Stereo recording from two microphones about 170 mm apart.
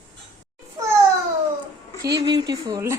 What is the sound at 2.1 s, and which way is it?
Speech, 25° right (ahead or behind).